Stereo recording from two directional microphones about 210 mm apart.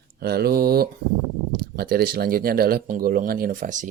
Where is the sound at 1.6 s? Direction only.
45° right (ahead or behind).